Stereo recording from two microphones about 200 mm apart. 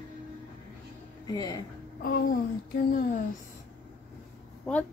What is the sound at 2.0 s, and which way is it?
Speech, 45° left (ahead or behind).